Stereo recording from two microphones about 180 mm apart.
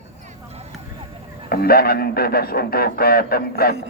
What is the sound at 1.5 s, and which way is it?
Speech, 55° left (ahead or behind).